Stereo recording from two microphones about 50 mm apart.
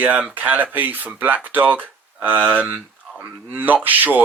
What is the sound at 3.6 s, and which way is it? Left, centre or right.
Speech, right.